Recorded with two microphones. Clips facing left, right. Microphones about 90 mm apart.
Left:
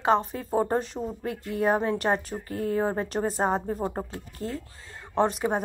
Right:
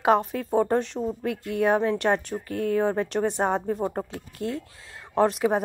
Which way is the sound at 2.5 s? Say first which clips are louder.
Right 3 dB; 65° right (ahead or behind).